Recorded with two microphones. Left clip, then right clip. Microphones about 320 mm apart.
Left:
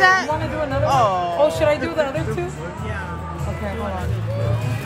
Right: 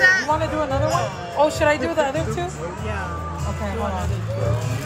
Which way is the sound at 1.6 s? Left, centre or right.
Right.